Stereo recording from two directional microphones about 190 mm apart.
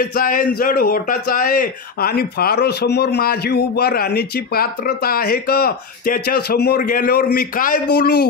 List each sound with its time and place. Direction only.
0.0 s speech: 45° left (ahead or behind)